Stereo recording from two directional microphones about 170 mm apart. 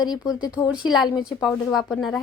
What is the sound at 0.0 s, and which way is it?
Speech, 25° left (ahead or behind).